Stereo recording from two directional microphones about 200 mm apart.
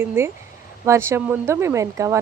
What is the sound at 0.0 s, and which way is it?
Speech, 10° right (ahead or behind).